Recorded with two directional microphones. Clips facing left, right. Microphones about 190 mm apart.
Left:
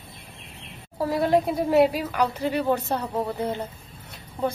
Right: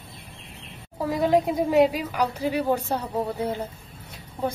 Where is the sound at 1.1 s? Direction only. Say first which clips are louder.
Right 1 dB; 15° right (ahead or behind).